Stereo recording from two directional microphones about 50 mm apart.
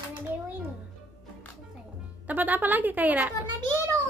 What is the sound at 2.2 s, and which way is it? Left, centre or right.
Speech, right.